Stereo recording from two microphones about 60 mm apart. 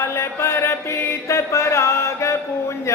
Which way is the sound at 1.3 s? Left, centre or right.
Left.